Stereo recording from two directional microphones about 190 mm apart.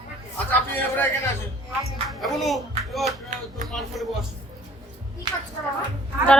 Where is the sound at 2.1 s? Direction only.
Centre (ahead or behind).